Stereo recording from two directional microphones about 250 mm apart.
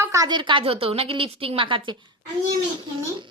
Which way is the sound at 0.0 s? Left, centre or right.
Centre.